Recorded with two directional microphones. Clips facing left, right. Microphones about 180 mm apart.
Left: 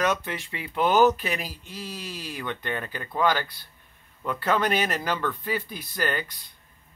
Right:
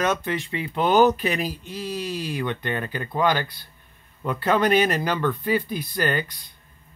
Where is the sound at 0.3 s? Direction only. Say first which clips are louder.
Right 7 dB; 5° left (ahead or behind).